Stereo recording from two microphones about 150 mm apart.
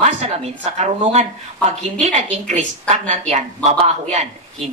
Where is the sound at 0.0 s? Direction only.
50° right (ahead or behind).